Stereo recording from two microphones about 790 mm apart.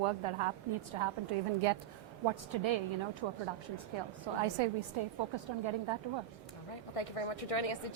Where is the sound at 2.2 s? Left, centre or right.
Right.